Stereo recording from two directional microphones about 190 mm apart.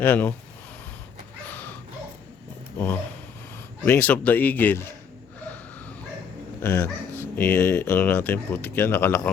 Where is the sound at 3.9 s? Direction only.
10° left (ahead or behind).